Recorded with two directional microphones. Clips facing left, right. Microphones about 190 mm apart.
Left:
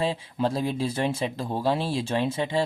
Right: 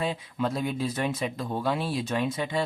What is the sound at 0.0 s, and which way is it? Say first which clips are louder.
Speech: left 3 dB; 30° left (ahead or behind).